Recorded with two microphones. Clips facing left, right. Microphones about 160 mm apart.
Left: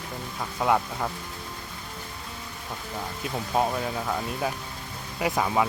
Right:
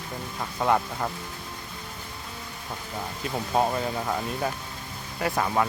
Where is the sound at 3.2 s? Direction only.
5° right (ahead or behind).